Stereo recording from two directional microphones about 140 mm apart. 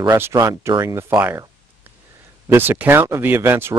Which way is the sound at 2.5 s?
15° right (ahead or behind).